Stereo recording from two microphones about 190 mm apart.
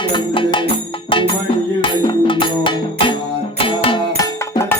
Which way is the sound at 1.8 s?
25° left (ahead or behind).